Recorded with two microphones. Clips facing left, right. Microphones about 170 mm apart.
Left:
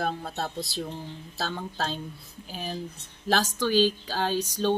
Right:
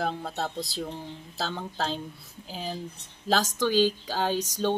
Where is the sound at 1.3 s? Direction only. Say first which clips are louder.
Even; 15° right (ahead or behind).